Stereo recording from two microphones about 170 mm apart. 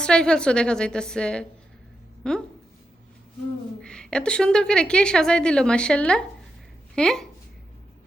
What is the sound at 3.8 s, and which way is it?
A woman's voice, 5° left (ahead or behind).